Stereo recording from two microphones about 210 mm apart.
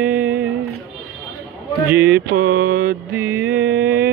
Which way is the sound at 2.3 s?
45° right (ahead or behind).